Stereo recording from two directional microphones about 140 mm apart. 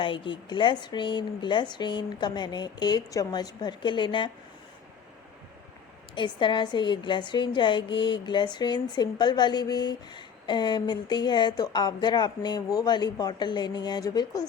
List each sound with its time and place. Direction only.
0.0 s a woman's voice: 35° left (ahead or behind)
6.1 s a woman's voice: 35° left (ahead or behind)